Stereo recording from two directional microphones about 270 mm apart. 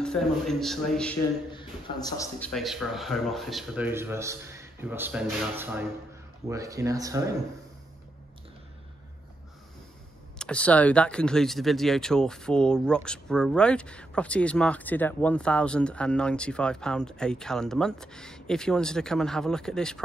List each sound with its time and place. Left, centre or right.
0.0 s speech: centre
1.5 s a man's voice: centre
2.5 s speech: centre
10.4 s speech: centre